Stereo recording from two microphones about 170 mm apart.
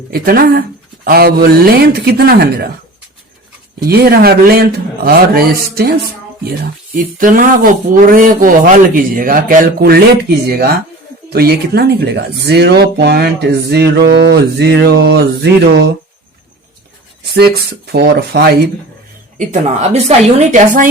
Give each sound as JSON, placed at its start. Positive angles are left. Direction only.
{"t": 0.1, "sound": "speech", "side_deg": -60}
{"t": 3.8, "sound": "speech", "side_deg": -65}
{"t": 6.9, "sound": "speech", "side_deg": -55}
{"t": 17.3, "sound": "speech", "side_deg": -70}
{"t": 19.4, "sound": "a woman's voice", "side_deg": -40}